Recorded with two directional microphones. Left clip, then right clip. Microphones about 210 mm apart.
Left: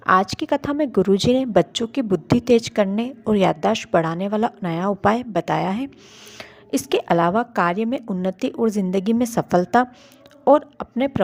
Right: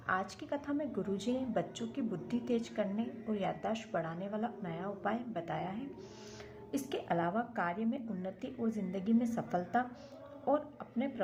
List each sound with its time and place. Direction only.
0.0 s a woman's voice: 45° left (ahead or behind)